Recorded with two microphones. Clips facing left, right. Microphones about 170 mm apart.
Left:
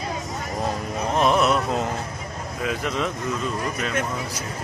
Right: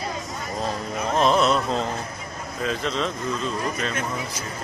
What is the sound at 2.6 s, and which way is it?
Speech, 10° left (ahead or behind).